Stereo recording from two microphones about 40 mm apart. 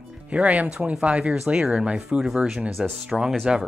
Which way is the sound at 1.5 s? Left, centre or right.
Centre.